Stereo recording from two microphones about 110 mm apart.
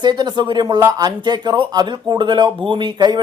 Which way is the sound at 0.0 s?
40° right (ahead or behind).